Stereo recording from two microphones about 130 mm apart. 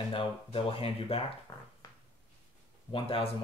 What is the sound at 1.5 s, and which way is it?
Speech, 35° left (ahead or behind).